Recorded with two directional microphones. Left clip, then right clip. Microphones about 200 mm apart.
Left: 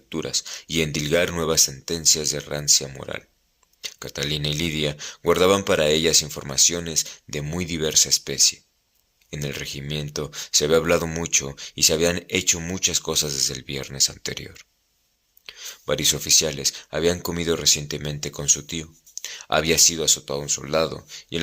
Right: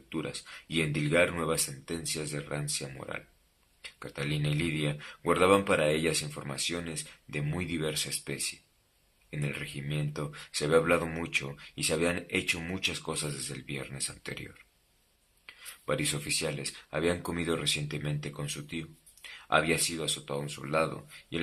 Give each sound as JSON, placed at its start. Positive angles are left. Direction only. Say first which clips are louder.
{"t": 0.1, "sound": "speech", "louder": "left 10 dB", "side_deg": 45}